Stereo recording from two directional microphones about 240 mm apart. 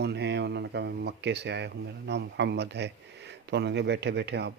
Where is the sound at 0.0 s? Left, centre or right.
Right.